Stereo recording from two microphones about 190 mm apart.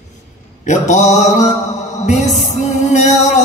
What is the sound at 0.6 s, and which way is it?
Mantra, 40° left (ahead or behind).